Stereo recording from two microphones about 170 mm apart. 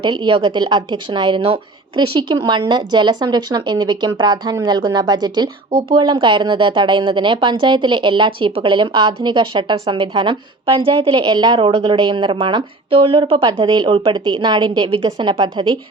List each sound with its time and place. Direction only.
0.0 s a woman's voice: 30° right (ahead or behind)